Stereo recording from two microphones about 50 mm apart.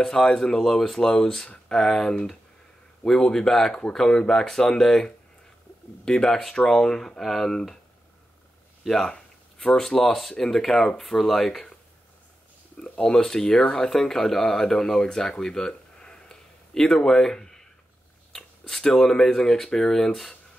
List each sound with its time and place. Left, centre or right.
0.0 s speech: centre
8.8 s speech: centre
13.0 s speech: centre